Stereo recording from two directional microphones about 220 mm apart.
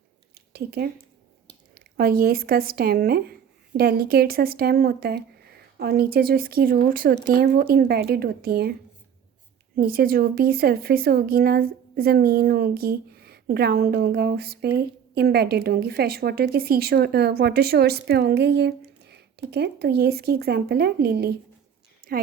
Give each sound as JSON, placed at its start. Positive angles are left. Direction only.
{"t": 0.5, "sound": "a woman's voice", "side_deg": -45}
{"t": 9.7, "sound": "a woman's voice", "side_deg": -40}